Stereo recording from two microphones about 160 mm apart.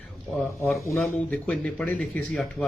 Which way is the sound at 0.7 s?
20° left (ahead or behind).